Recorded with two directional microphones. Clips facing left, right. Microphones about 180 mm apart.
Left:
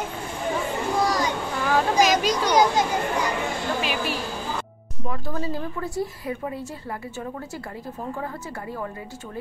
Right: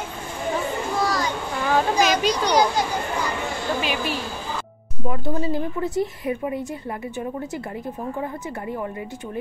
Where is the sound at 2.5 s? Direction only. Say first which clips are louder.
Left 3 dB; 20° left (ahead or behind).